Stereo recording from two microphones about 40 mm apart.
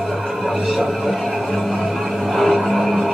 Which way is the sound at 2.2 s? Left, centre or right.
Centre.